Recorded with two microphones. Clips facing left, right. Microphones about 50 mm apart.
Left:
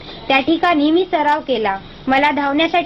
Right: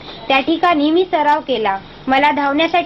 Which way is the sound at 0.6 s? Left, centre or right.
Centre.